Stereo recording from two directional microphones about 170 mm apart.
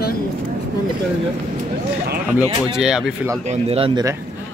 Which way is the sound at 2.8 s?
5° right (ahead or behind).